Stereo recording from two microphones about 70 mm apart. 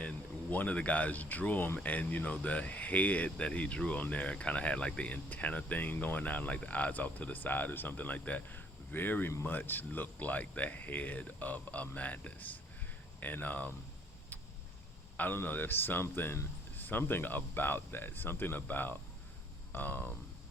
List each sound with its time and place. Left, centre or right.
0.5 s speech: left
15.2 s speech: left